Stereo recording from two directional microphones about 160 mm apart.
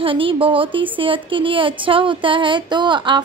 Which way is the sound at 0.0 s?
35° right (ahead or behind).